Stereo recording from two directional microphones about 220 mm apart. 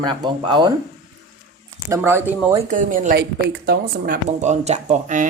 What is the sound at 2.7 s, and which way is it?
Speech, 35° right (ahead or behind).